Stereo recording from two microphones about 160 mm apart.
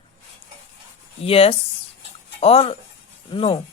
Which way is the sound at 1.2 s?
35° left (ahead or behind).